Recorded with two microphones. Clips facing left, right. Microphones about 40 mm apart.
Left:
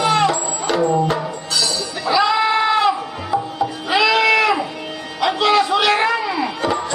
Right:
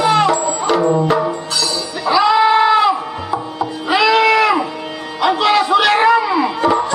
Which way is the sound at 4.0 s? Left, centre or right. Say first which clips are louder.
Right 3 dB; centre.